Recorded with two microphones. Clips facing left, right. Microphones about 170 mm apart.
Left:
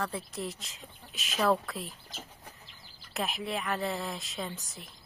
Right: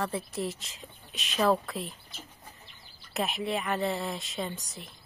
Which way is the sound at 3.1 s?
Centre (ahead or behind).